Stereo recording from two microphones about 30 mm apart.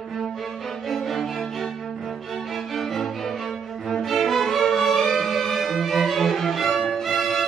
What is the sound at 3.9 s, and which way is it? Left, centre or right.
Cello, centre.